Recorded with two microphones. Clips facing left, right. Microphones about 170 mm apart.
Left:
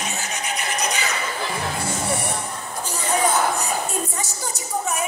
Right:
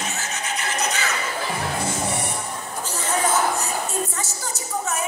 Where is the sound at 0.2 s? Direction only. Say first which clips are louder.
Left 1 dB; 15° left (ahead or behind).